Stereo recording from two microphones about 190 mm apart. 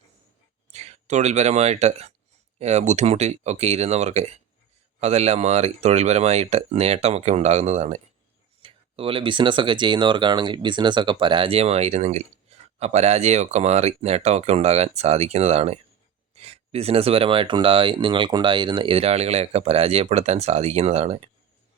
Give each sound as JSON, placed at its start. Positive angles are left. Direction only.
{"t": 0.7, "sound": "speech", "side_deg": -35}